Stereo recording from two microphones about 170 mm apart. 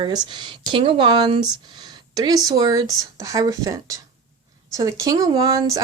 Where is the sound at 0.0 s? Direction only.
25° right (ahead or behind).